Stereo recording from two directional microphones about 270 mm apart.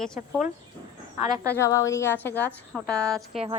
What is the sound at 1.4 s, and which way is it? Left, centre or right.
A woman's voice, centre.